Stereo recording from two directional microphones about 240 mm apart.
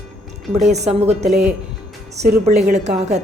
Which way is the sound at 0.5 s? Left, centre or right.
Right.